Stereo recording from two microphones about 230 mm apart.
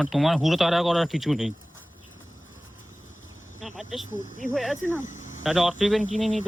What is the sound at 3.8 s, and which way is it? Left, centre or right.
A man's voice, centre.